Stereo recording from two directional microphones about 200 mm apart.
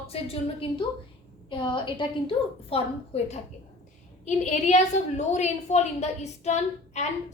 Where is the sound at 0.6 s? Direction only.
25° left (ahead or behind).